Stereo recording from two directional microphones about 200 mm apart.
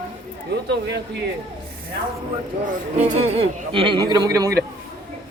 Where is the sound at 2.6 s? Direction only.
35° right (ahead or behind); by 4.5 s 15° right (ahead or behind).